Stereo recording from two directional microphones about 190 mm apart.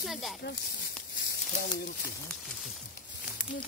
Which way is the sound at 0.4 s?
55° left (ahead or behind).